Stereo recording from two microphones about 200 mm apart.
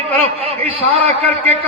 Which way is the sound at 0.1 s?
30° right (ahead or behind).